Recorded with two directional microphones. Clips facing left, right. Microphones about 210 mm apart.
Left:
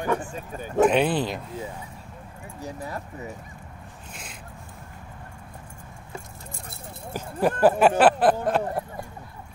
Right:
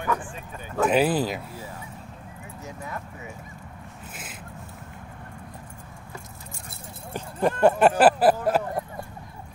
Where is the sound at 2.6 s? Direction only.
35° left (ahead or behind).